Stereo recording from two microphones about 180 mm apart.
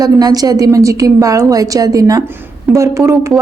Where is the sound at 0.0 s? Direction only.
20° right (ahead or behind).